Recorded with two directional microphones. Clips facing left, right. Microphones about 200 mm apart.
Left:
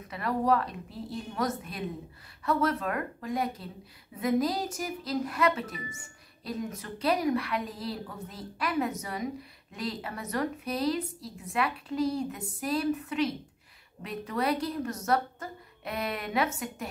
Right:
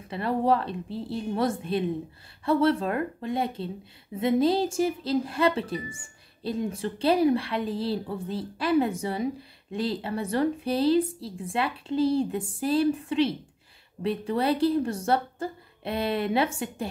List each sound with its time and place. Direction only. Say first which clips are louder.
0.1 s speech: right 3 dB; 30° right (ahead or behind)